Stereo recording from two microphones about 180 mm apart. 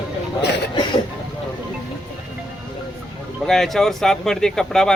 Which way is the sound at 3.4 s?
Centre (ahead or behind).